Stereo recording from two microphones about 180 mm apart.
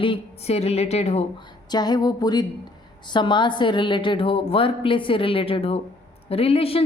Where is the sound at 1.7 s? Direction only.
20° left (ahead or behind).